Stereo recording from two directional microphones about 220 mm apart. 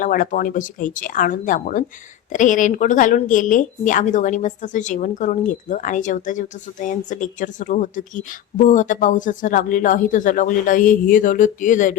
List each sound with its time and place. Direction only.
0.0 s speech: 40° left (ahead or behind)